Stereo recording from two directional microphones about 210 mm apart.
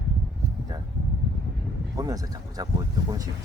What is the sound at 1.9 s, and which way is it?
Speech, 15° right (ahead or behind).